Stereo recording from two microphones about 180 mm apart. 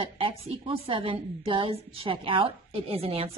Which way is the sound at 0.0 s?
30° right (ahead or behind).